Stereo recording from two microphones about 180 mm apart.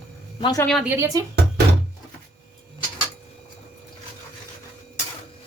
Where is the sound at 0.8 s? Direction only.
15° right (ahead or behind).